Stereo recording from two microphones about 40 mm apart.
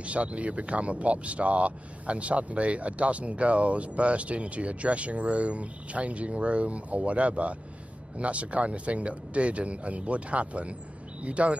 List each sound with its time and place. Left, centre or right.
0.0 s speech: right